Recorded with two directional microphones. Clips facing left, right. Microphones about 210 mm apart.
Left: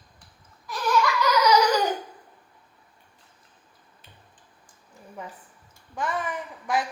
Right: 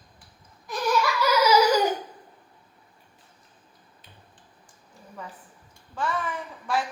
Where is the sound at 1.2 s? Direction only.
5° right (ahead or behind).